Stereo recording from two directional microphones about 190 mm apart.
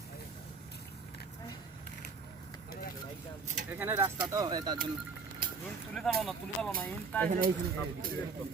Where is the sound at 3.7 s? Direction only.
10° right (ahead or behind).